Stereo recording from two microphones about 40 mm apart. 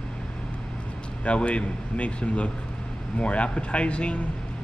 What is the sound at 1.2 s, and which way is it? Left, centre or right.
A man's voice, left.